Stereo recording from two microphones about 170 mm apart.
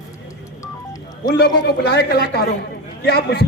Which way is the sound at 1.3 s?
70° left (ahead or behind).